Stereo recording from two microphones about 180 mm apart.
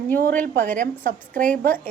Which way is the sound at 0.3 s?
50° right (ahead or behind).